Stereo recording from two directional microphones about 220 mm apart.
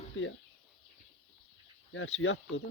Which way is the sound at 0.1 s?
65° left (ahead or behind).